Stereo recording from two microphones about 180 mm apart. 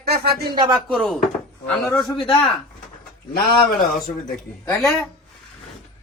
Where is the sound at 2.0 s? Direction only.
20° left (ahead or behind).